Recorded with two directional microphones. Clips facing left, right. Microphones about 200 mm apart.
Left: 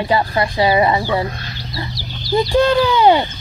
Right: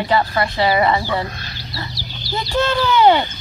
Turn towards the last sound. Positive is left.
turn(degrees=15)  # may be behind; listen again after turning